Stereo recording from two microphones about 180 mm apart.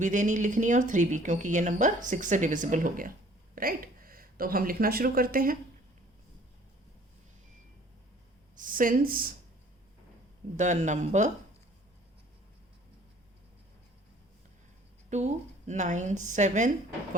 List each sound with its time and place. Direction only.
0.0 s speech: 45° right (ahead or behind)
8.5 s speech: 50° right (ahead or behind)
10.6 s speech: 40° right (ahead or behind)
15.1 s speech: 40° right (ahead or behind)